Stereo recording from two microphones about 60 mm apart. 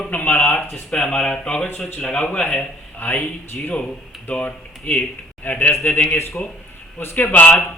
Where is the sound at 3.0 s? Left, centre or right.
Left.